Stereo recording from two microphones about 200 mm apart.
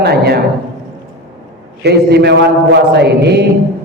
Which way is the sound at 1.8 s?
55° right (ahead or behind).